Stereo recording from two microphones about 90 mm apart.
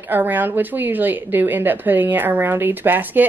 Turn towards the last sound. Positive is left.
turn(degrees=-20)  # may be behind; listen again after turning